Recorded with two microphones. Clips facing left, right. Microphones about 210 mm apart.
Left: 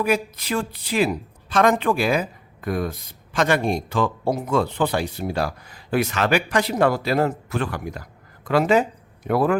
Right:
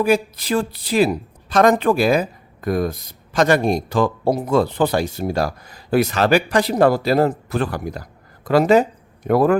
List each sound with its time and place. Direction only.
0.0 s speech: 30° right (ahead or behind)